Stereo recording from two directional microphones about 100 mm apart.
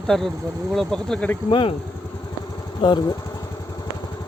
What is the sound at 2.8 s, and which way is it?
Speech, 55° left (ahead or behind).